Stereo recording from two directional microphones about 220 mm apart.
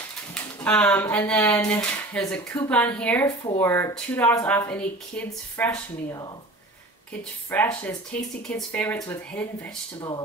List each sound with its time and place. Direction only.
0.3 s speech: 5° left (ahead or behind)
7.5 s speech: 5° left (ahead or behind)
9.9 s speech: 20° left (ahead or behind)